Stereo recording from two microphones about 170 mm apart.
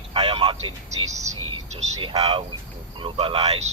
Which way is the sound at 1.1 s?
40° right (ahead or behind).